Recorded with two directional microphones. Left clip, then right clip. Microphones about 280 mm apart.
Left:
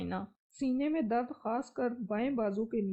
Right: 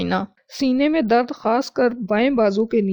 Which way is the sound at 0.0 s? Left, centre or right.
Right.